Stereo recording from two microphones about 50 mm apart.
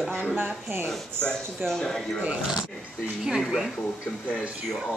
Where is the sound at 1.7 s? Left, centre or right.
Centre.